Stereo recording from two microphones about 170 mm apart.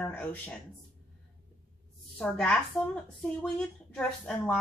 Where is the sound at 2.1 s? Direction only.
5° left (ahead or behind).